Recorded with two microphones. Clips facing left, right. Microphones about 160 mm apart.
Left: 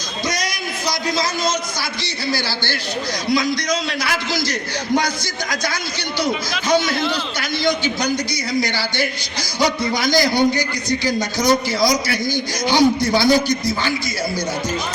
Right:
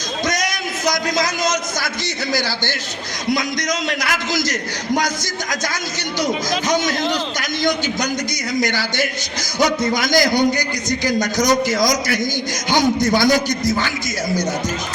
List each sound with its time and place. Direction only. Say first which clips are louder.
0.9 s a man's voice: right 2 dB; 45° right (ahead or behind)
3.8 s a man's voice: right 1 dB; 45° right (ahead or behind)
6.1 s a man's voice: right 2 dB; 45° right (ahead or behind)
8.6 s a man's voice: right 1 dB; 45° right (ahead or behind)